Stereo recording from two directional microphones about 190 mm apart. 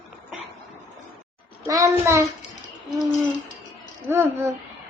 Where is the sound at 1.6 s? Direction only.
15° right (ahead or behind).